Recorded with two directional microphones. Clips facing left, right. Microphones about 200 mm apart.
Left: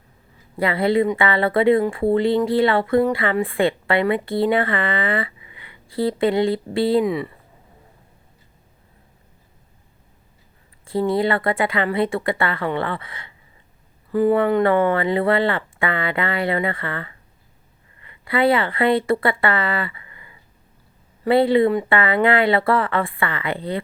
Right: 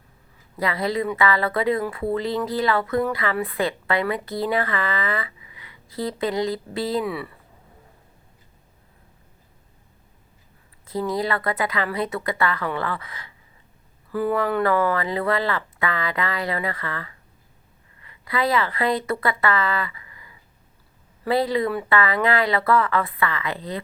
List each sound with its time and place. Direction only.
0.5 s speech: 30° left (ahead or behind)
7.0 s speech: 15° left (ahead or behind)
10.8 s speech: 30° left (ahead or behind)